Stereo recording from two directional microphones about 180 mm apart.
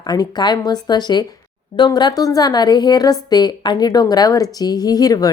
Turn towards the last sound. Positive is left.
turn(degrees=20)  # may be behind; listen again after turning